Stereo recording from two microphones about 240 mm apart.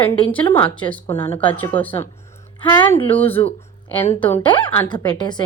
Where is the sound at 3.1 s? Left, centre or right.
Centre.